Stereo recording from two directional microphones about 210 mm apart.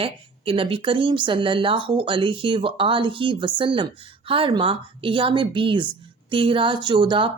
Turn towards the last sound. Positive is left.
turn(degrees=-25)  # may be behind; listen again after turning